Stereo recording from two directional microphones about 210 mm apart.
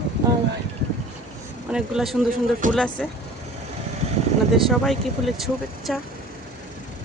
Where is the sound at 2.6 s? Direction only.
40° right (ahead or behind).